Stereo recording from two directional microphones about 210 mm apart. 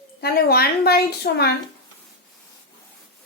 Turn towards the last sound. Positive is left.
turn(degrees=50)  # may be behind; listen again after turning